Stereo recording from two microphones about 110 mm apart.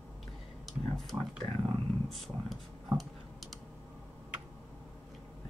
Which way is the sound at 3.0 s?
Centre (ahead or behind).